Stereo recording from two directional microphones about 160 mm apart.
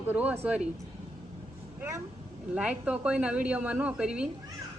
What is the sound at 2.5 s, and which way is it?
A woman's voice, 10° right (ahead or behind).